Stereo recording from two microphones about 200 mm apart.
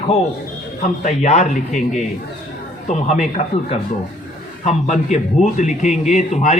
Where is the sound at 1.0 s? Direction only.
35° left (ahead or behind).